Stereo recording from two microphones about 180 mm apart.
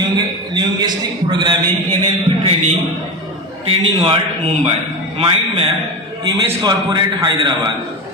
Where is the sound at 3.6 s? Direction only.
30° right (ahead or behind).